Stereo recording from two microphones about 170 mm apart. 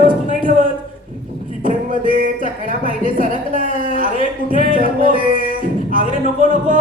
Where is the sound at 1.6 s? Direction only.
55° right (ahead or behind).